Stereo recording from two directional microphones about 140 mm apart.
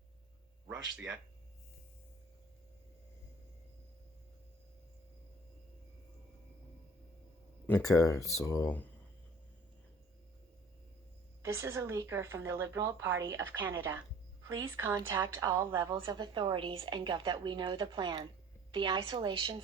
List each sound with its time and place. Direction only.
7.7 s speech: 25° left (ahead or behind)
11.4 s speech: 20° right (ahead or behind)
15.9 s a woman's voice: 35° right (ahead or behind)